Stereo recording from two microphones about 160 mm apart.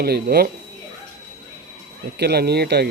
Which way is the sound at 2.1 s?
85° right.